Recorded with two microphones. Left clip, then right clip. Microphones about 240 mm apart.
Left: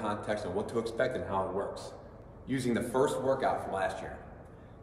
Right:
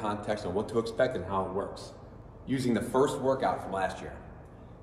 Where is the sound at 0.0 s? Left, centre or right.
Centre.